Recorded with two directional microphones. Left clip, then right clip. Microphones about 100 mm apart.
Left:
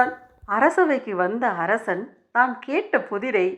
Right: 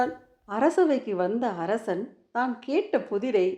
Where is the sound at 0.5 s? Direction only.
15° right (ahead or behind).